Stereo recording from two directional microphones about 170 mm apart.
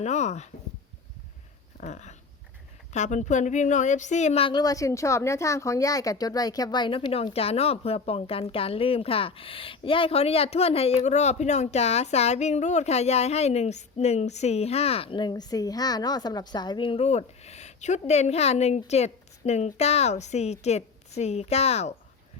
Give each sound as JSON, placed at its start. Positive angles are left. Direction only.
{"t": 0.0, "sound": "speech", "side_deg": 40}
{"t": 1.8, "sound": "dog", "side_deg": 45}
{"t": 2.9, "sound": "speech", "side_deg": 45}